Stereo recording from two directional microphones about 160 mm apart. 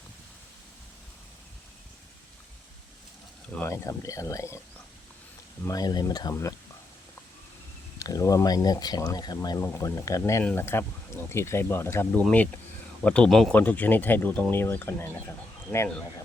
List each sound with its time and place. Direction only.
3.5 s speech: 15° left (ahead or behind)
5.6 s speech: 25° left (ahead or behind)
7.9 s speech: 20° left (ahead or behind)